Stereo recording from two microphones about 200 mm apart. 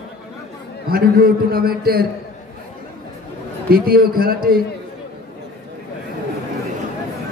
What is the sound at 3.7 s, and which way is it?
Speech, 50° right (ahead or behind).